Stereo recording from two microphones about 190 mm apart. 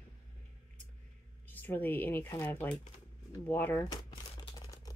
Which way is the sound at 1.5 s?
10° left (ahead or behind).